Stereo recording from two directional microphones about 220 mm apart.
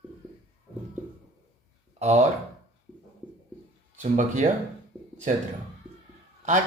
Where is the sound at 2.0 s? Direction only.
30° right (ahead or behind).